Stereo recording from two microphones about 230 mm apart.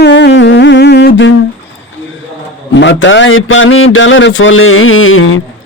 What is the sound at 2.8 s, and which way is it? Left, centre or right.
A man's voice, left.